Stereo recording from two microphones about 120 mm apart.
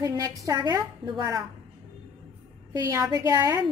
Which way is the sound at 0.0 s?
30° right (ahead or behind).